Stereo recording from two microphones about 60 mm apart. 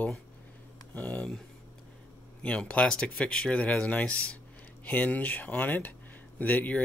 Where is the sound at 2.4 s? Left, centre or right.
Centre.